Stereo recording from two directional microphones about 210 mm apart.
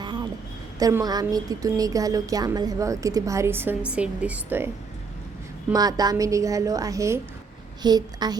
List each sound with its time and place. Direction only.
0.0 s a sound: 20° right (ahead or behind)
0.8 s a woman's voice: 15° right (ahead or behind)
5.7 s a woman's voice: 20° right (ahead or behind)